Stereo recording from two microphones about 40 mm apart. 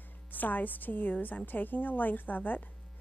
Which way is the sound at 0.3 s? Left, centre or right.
Left.